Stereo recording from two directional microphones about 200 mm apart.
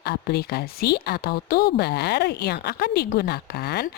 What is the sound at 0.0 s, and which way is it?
A woman's voice, 55° left (ahead or behind).